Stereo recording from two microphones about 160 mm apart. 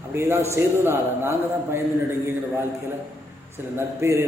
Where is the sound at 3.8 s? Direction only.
15° right (ahead or behind).